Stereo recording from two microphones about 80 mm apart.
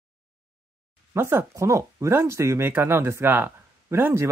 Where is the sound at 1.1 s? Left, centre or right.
Right.